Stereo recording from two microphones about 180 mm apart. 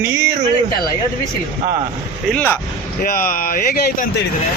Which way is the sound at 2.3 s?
10° left (ahead or behind).